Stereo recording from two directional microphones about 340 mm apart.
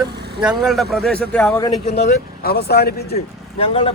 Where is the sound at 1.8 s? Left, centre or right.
Centre.